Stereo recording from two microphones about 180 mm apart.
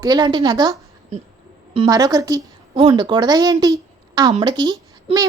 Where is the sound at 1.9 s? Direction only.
20° right (ahead or behind).